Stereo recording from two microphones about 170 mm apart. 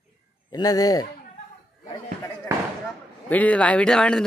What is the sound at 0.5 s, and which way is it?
Speech, 20° left (ahead or behind).